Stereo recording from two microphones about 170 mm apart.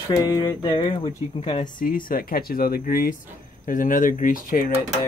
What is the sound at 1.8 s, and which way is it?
Speech, 55° left (ahead or behind).